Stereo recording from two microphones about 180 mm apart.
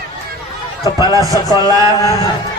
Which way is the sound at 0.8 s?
20° right (ahead or behind).